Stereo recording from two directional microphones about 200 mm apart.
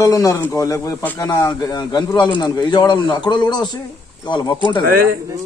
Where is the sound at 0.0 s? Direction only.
15° left (ahead or behind).